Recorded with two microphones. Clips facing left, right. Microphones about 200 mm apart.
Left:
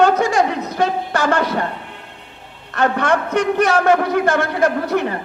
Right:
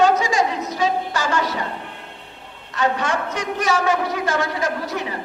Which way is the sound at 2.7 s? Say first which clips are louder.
Left 4 dB; 60° left (ahead or behind).